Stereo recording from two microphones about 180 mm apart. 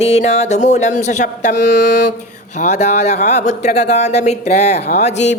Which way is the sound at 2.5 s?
40° left (ahead or behind).